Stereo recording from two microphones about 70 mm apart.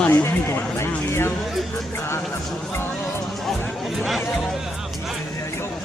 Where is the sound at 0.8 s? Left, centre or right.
Left.